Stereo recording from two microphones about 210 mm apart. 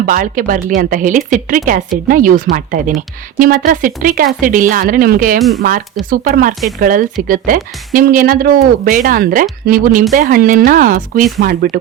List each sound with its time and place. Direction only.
0.0 s speech: 40° right (ahead or behind)